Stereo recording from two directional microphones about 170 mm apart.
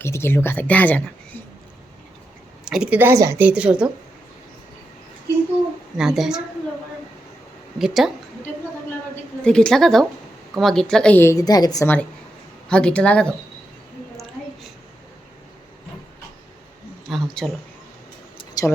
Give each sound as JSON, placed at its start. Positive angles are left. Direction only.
{"t": 0.0, "sound": "a woman's voice", "side_deg": 15}
{"t": 2.6, "sound": "speech", "side_deg": -5}
{"t": 6.0, "sound": "a woman's voice", "side_deg": -5}
{"t": 7.8, "sound": "a woman's voice", "side_deg": 0}
{"t": 9.4, "sound": "a woman's voice", "side_deg": 5}
{"t": 12.6, "sound": "a woman's voice", "side_deg": 5}
{"t": 17.1, "sound": "speech", "side_deg": 0}
{"t": 18.6, "sound": "a sound", "side_deg": 20}